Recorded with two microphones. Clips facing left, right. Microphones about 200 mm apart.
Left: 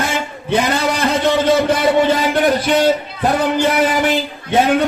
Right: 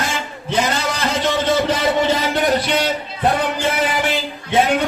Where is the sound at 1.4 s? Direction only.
55° left (ahead or behind).